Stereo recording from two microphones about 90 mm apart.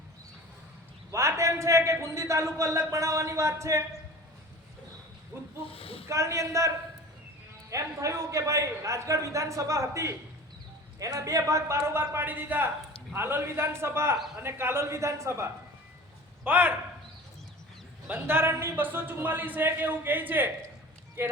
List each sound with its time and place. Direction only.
1.1 s a man's voice: 35° right (ahead or behind)
5.3 s a man's voice: 25° right (ahead or behind)
5.7 s speech: 90° left
6.1 s a man's voice: 35° right (ahead or behind)
16.4 s a man's voice: 20° right (ahead or behind)
18.1 s a man's voice: 25° right (ahead or behind)